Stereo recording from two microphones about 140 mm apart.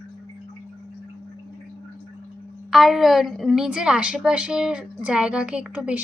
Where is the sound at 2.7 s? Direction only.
Centre (ahead or behind).